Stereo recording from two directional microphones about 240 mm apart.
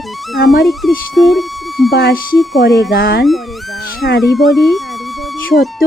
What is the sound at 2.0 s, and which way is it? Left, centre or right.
Speech, left.